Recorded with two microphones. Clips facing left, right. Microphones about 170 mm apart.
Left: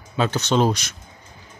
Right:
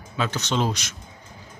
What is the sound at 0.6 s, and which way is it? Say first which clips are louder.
Speech: left 6 dB; 45° left (ahead or behind).